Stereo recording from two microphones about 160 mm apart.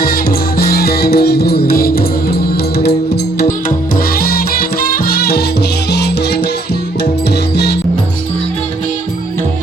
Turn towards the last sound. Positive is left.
turn(degrees=90)